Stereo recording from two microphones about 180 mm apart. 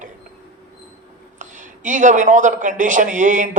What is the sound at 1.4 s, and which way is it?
A man's voice, 45° right (ahead or behind).